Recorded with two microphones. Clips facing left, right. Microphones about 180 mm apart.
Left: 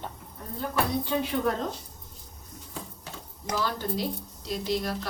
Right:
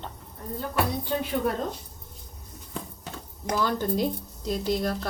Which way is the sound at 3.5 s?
50° right (ahead or behind).